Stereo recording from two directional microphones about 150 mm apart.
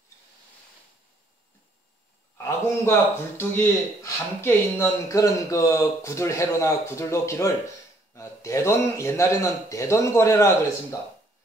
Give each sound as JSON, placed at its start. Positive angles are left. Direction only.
{"t": 2.3, "sound": "a man's voice", "side_deg": 20}